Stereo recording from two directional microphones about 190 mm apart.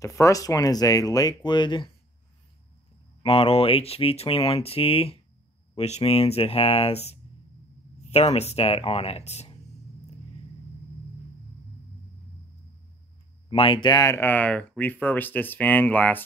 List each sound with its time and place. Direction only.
0.0 s speech: 15° left (ahead or behind)
3.2 s speech: 30° left (ahead or behind)
13.5 s speech: 25° left (ahead or behind); by 16.2 s 10° left (ahead or behind)